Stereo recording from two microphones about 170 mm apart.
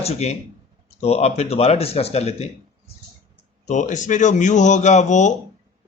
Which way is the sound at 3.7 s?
45° left (ahead or behind).